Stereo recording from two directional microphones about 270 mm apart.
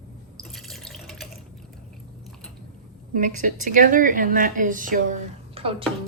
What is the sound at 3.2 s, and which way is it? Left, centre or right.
A woman's voice, right.